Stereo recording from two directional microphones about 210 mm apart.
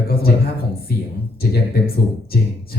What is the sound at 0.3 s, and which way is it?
Speech, 50° left (ahead or behind).